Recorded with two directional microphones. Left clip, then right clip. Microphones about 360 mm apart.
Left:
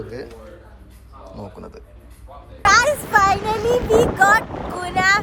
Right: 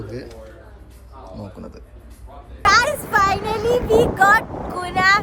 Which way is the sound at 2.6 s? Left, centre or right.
Centre.